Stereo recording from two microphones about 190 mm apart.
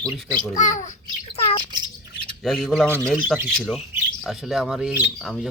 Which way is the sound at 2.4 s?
Centre (ahead or behind).